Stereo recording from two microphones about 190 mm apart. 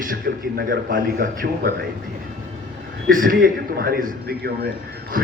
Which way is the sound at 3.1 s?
45° right (ahead or behind).